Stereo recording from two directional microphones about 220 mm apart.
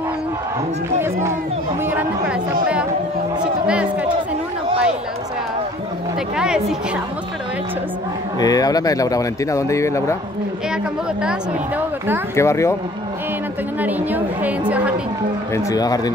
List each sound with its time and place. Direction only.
1.9 s speech: 5° right (ahead or behind)
6.3 s speech: 5° right (ahead or behind)
8.4 s speech: 15° left (ahead or behind)
12.4 s speech: 15° left (ahead or behind)
13.7 s a woman's voice: 10° right (ahead or behind)
15.5 s speech: 15° left (ahead or behind)